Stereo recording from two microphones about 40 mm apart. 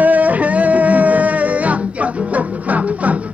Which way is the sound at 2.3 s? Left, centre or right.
Right.